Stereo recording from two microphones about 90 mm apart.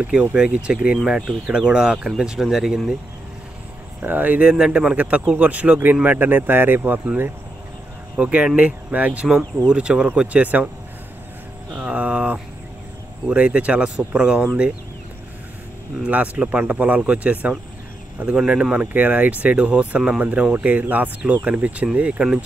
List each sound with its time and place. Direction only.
0.0 s speech: 15° right (ahead or behind)
4.0 s speech: 20° right (ahead or behind)
8.2 s speech: 15° right (ahead or behind)
11.8 s a sound: 15° right (ahead or behind)
13.3 s speech: 10° right (ahead or behind)
16.0 s speech: 15° right (ahead or behind)